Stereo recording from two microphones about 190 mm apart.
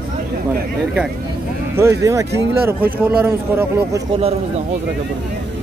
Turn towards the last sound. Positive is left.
turn(degrees=-15)  # may be behind; listen again after turning